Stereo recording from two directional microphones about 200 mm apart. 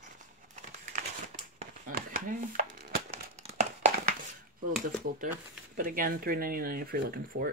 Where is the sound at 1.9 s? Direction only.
45° right (ahead or behind).